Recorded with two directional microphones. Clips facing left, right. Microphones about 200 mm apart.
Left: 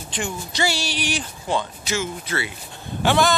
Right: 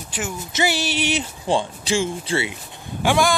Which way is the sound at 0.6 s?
20° right (ahead or behind).